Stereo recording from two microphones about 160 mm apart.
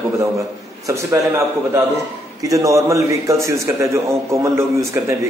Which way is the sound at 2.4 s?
20° right (ahead or behind).